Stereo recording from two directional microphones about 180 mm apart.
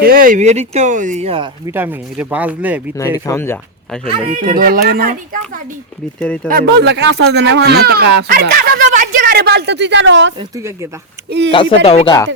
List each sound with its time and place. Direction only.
0.0 s speech: 50° right (ahead or behind); by 1.5 s 35° right (ahead or behind)
1.6 s speech: 10° right (ahead or behind)
3.0 s speech: 15° left (ahead or behind)
4.4 s speech: 55° right (ahead or behind)
6.1 s speech: 5° left (ahead or behind)
6.5 s speech: 60° right (ahead or behind); by 10.3 s 90° right
11.3 s speech: 75° right (ahead or behind)
11.5 s speech: 30° left (ahead or behind)